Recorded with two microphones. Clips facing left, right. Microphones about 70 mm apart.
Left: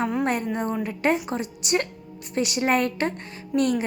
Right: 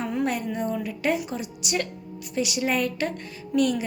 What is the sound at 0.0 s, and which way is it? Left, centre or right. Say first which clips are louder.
A woman's voice: left 2 dB; left.